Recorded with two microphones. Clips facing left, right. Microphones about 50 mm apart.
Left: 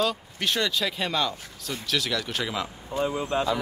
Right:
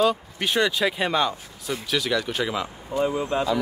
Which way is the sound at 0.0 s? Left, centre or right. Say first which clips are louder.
Right 5 dB; centre.